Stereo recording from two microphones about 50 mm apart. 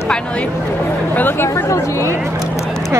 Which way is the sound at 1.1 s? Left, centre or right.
Left.